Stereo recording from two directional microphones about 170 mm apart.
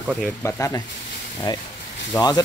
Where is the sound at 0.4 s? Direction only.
15° left (ahead or behind).